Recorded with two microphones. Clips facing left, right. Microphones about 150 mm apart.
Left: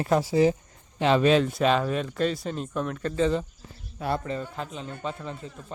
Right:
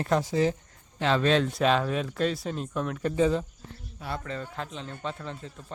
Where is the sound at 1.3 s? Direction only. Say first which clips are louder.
Left 2 dB; centre (ahead or behind).